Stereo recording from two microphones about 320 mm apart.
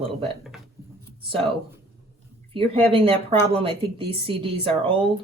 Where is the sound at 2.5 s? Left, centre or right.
Centre.